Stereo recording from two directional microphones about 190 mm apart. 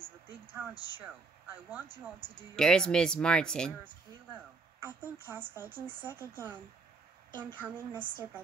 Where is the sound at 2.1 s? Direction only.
25° right (ahead or behind).